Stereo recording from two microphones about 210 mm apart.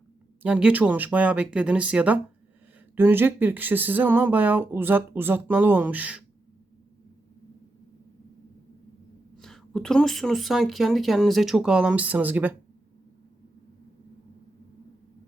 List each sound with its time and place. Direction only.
0.4 s speech: 5° right (ahead or behind)
9.4 s speech: centre (ahead or behind)